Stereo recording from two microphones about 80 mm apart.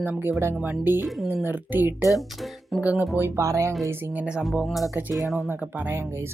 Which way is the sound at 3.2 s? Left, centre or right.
Right.